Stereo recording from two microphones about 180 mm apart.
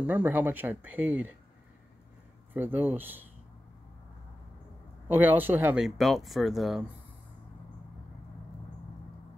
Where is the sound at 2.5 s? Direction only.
10° right (ahead or behind).